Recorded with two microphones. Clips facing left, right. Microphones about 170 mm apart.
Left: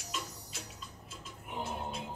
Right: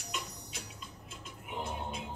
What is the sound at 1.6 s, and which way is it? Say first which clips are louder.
Music: left 1 dB; centre (ahead or behind).